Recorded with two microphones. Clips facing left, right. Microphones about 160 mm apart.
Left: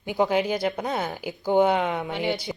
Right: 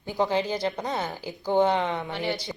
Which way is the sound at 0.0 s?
15° left (ahead or behind).